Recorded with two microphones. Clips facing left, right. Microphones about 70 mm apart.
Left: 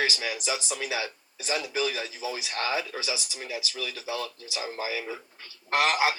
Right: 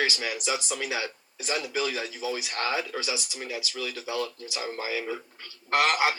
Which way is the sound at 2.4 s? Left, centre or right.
Right.